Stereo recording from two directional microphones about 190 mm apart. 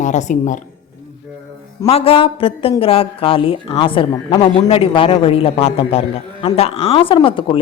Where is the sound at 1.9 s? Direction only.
30° left (ahead or behind).